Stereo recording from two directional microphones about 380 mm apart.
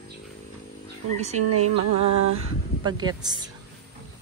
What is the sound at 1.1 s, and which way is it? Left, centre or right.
Speech, centre.